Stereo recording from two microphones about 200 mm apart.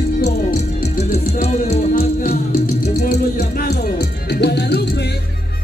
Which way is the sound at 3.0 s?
45° left (ahead or behind).